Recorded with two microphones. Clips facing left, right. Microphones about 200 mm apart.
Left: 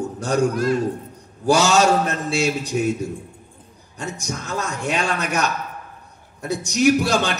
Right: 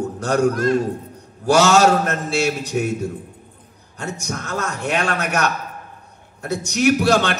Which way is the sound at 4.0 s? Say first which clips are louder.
Right 1 dB; 60° right (ahead or behind).